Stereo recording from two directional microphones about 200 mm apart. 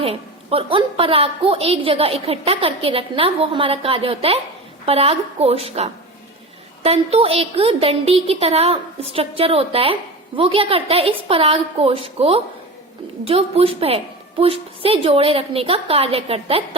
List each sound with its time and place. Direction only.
0.0 s a woman's voice: 30° right (ahead or behind)